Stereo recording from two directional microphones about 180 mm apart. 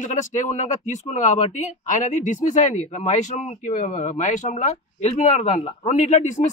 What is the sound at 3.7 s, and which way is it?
Speech, 40° left (ahead or behind).